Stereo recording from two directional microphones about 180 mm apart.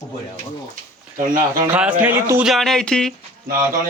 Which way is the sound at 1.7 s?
5° right (ahead or behind).